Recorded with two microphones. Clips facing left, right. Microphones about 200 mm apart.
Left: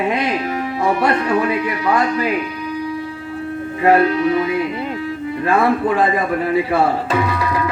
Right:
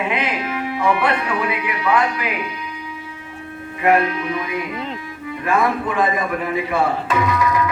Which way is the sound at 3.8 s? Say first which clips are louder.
Left 4 dB; 30° left (ahead or behind).